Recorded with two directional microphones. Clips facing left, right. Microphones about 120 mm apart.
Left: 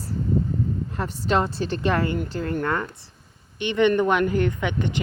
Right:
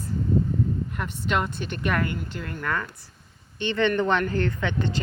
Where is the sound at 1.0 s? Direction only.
35° left (ahead or behind).